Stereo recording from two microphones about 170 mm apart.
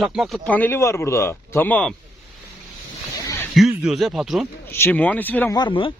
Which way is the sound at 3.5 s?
Centre (ahead or behind).